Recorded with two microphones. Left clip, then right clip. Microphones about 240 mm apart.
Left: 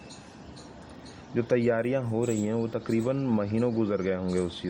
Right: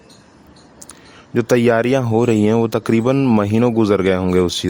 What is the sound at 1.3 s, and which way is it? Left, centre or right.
Speech, right.